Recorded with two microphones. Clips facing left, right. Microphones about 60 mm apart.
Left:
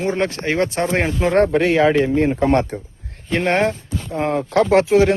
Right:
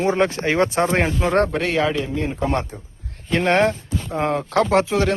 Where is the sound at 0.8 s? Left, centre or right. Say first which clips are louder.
Even; centre.